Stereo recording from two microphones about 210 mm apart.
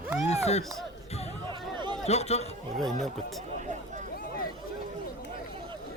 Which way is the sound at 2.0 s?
30° left (ahead or behind).